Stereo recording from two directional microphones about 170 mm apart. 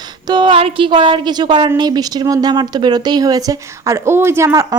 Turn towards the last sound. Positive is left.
turn(degrees=-20)  # may be behind; listen again after turning